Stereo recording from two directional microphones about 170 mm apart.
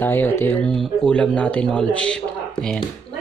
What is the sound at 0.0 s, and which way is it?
A man's voice, 10° left (ahead or behind).